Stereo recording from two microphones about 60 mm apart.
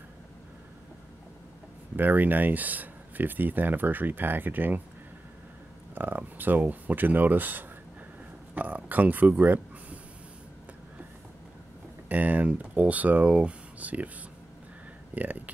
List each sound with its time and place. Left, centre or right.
2.0 s speech: right
5.9 s speech: right
12.1 s speech: right
15.1 s speech: right